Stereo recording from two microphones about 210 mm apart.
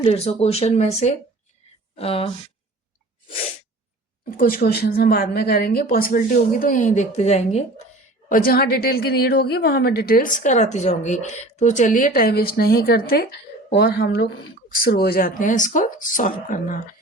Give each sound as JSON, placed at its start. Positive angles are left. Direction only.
{"t": 0.0, "sound": "speech", "side_deg": 30}
{"t": 4.3, "sound": "a woman's voice", "side_deg": 40}
{"t": 8.3, "sound": "a woman's voice", "side_deg": 45}